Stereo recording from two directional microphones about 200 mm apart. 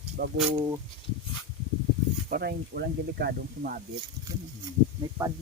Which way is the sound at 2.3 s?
50° right (ahead or behind).